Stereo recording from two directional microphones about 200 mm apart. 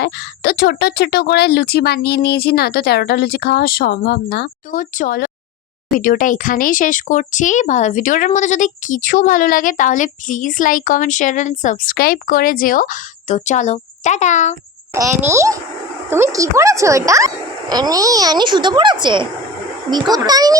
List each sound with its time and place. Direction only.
0.0 s speech: 50° left (ahead or behind); by 14.5 s 35° left (ahead or behind)
14.9 s a child's voice: 15° right (ahead or behind)